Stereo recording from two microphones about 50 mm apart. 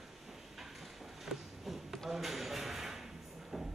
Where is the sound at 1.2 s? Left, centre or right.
Centre.